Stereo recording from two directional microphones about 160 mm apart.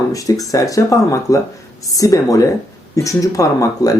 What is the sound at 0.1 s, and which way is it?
Speech, 20° left (ahead or behind).